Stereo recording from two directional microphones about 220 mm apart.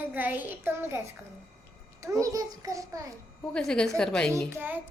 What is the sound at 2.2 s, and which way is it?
Child singing, 15° right (ahead or behind).